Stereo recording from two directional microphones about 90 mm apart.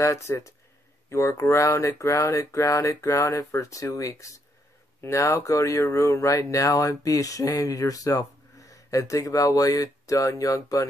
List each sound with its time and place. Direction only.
0.0 s speech: 35° left (ahead or behind)